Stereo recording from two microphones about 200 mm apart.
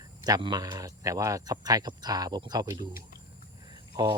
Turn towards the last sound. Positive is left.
turn(degrees=-20)  # may be behind; listen again after turning